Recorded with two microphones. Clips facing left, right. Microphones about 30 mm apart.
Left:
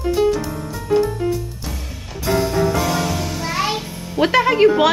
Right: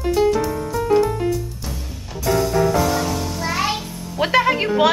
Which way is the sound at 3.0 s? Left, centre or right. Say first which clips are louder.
Left 1 dB; left.